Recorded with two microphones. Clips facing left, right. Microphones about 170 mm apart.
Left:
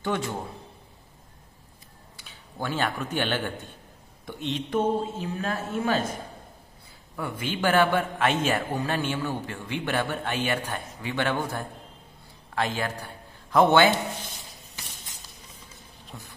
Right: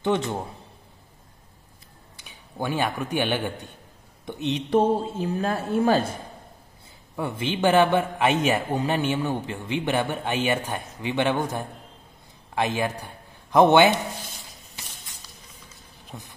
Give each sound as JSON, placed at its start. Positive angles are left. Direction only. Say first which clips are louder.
{"t": 0.0, "sound": "a man's voice", "louder": "right 4 dB", "side_deg": -20}
{"t": 2.1, "sound": "a man's voice", "louder": "right 4 dB", "side_deg": -15}
{"t": 4.6, "sound": "speech", "louder": "right 4 dB", "side_deg": -35}
{"t": 7.2, "sound": "a man's voice", "louder": "right 4 dB", "side_deg": -20}
{"t": 16.1, "sound": "vehicle", "louder": "right 3 dB", "side_deg": -20}